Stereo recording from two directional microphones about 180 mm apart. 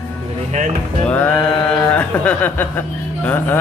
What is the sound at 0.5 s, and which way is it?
Speech, 45° right (ahead or behind).